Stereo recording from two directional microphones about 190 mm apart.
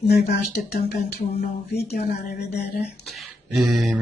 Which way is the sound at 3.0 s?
Centre (ahead or behind).